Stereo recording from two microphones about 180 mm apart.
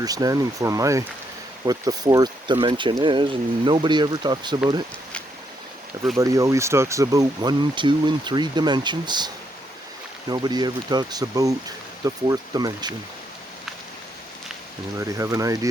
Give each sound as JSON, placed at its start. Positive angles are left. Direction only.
{"t": 0.0, "sound": "speech", "side_deg": -20}
{"t": 6.1, "sound": "speech", "side_deg": -20}
{"t": 14.9, "sound": "speech", "side_deg": -15}